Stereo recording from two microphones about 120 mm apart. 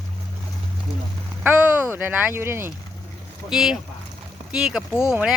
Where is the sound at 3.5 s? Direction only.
5° right (ahead or behind).